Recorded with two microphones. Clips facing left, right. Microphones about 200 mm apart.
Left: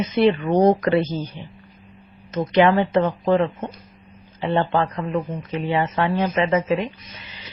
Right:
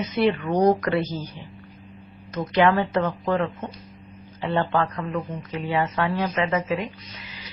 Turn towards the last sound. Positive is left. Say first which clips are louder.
# left 4 dB
turn(degrees=25)  # may be behind; listen again after turning